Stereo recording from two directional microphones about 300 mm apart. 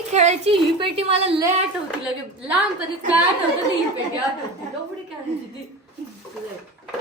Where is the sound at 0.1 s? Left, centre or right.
Right.